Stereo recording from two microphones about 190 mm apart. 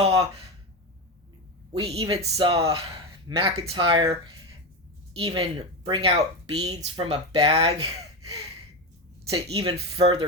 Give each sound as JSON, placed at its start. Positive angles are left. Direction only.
{"t": 0.0, "sound": "a sound", "side_deg": -30}
{"t": 1.7, "sound": "speech", "side_deg": -30}
{"t": 5.4, "sound": "speech", "side_deg": -30}
{"t": 9.3, "sound": "speech", "side_deg": -25}